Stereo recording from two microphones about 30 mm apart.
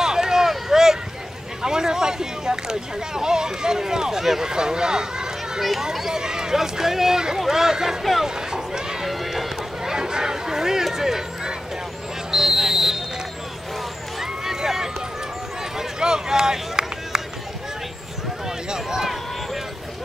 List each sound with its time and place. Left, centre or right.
0.0 s a sound: centre
1.6 s speech: right
5.6 s speech: centre
6.1 s speech: right
8.0 s speech: centre
8.5 s run: right
9.0 s run: centre
9.8 s speech: right
12.3 s a sound: centre
14.2 s a sound: centre
16.0 s speech: right
18.7 s speech: right